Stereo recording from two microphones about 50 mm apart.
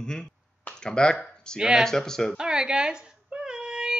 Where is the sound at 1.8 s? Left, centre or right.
Centre.